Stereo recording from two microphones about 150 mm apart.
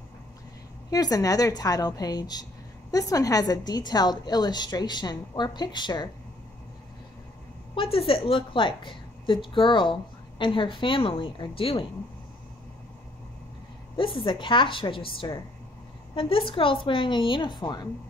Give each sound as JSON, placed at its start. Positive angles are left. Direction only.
{"t": 0.8, "sound": "a woman's voice", "side_deg": 25}
{"t": 7.7, "sound": "a woman's voice", "side_deg": 35}
{"t": 13.9, "sound": "a woman's voice", "side_deg": 35}